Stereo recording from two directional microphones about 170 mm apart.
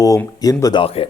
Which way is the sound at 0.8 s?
35° left (ahead or behind).